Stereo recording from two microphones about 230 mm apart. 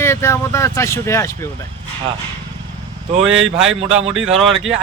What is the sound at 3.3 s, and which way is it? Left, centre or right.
Speech, right.